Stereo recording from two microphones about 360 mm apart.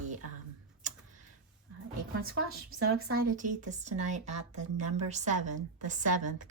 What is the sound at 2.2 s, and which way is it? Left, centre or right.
Speech, right.